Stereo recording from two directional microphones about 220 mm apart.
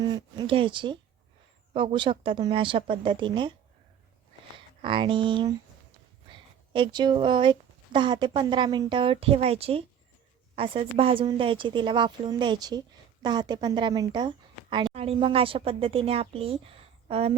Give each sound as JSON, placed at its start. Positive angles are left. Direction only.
{"t": 0.0, "sound": "a woman's voice", "side_deg": -20}
{"t": 4.5, "sound": "speech", "side_deg": -25}
{"t": 6.2, "sound": "a sound", "side_deg": -20}
{"t": 7.9, "sound": "a woman's voice", "side_deg": -20}